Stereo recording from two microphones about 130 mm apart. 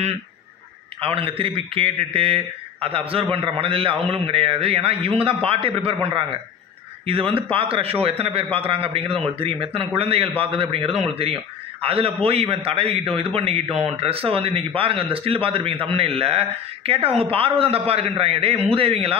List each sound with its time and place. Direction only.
1.0 s a man's voice: 45° right (ahead or behind)